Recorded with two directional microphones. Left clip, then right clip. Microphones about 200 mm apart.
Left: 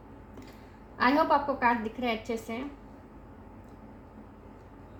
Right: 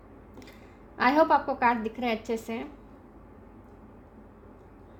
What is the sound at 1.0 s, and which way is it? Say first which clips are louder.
A woman's voice: right 2 dB; 50° right (ahead or behind).